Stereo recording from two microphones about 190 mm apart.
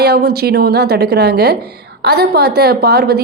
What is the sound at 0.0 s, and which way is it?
Speech, 60° right (ahead or behind).